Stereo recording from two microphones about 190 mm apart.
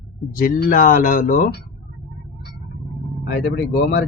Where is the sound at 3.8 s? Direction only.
55° left (ahead or behind).